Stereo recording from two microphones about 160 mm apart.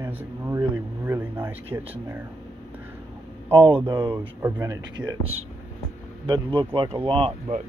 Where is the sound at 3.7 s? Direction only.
30° right (ahead or behind).